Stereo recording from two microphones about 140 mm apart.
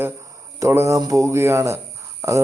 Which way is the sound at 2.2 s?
20° right (ahead or behind).